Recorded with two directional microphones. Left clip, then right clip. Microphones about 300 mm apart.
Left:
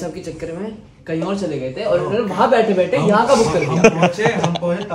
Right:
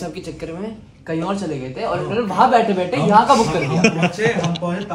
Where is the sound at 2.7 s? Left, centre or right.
Centre.